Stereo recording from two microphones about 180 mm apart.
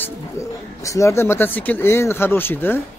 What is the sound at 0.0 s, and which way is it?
Speech, 15° left (ahead or behind).